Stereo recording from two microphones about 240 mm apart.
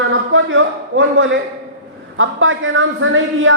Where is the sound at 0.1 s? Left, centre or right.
Right.